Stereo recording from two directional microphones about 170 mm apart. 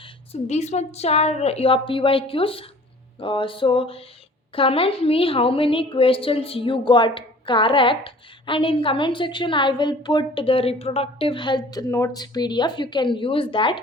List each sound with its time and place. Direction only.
0.4 s a woman's voice: 40° left (ahead or behind)